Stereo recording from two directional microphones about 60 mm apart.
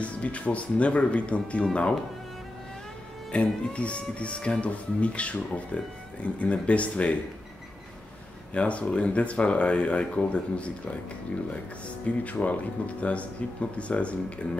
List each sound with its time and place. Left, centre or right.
0.0 s speech: left
3.3 s speech: left
8.5 s speech: left
12.3 s speech: left